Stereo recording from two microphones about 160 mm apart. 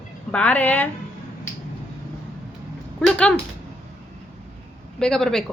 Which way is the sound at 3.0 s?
10° left (ahead or behind).